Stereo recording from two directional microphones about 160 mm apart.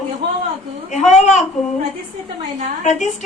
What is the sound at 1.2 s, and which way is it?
Speech, 45° left (ahead or behind).